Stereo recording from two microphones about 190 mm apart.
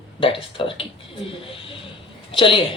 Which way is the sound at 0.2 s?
30° left (ahead or behind).